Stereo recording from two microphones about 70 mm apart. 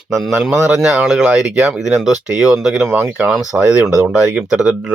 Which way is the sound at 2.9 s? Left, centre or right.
Right.